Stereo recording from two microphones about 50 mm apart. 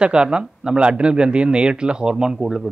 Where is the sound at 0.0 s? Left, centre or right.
Centre.